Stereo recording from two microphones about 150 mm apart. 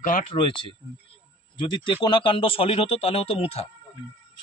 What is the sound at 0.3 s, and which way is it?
A man's voice, 35° left (ahead or behind).